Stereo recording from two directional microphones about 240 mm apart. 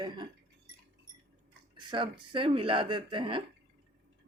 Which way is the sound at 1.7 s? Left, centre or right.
Centre.